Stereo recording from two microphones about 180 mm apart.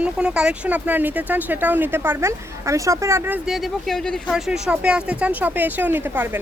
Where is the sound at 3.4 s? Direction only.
Centre (ahead or behind).